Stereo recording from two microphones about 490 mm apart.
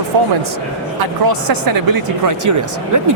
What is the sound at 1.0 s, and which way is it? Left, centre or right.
Speech, right.